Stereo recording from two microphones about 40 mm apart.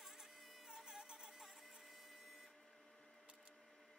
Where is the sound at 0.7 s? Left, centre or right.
Centre.